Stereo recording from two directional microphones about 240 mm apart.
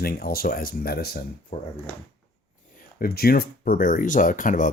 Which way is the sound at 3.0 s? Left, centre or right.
Left.